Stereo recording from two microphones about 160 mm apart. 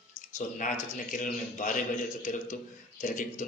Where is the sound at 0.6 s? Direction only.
50° left (ahead or behind).